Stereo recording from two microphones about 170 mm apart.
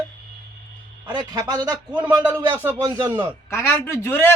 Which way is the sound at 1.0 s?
25° right (ahead or behind).